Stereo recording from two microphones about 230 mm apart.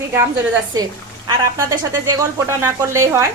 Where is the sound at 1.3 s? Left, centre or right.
Centre.